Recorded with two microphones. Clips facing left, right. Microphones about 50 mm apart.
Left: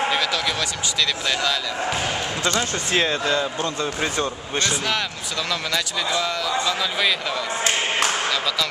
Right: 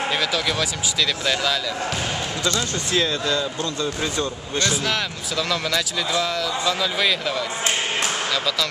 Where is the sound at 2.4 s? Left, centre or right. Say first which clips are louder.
Left 1 dB; left.